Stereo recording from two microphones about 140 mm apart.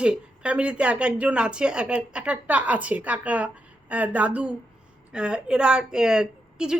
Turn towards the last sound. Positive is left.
turn(degrees=-5)  # may be behind; listen again after turning